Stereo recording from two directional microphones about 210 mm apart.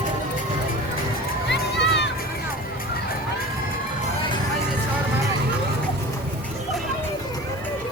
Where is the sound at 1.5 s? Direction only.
55° left (ahead or behind).